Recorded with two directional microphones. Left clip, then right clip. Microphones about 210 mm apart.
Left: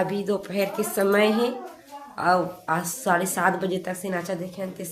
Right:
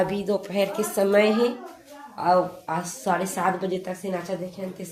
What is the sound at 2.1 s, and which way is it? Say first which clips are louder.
A woman's voice: right 1 dB; 20° left (ahead or behind).